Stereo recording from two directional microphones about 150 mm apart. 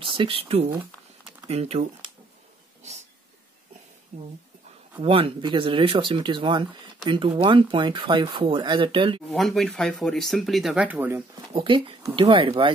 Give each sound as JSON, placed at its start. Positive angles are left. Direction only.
{"t": 0.0, "sound": "speech", "side_deg": -35}
{"t": 4.1, "sound": "speech", "side_deg": -50}
{"t": 9.3, "sound": "speech", "side_deg": 0}
{"t": 11.5, "sound": "speech", "side_deg": -35}